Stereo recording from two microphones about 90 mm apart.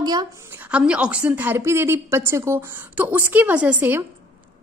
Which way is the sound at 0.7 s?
15° right (ahead or behind).